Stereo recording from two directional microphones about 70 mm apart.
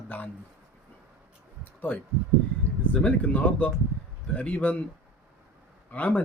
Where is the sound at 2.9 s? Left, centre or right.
Centre.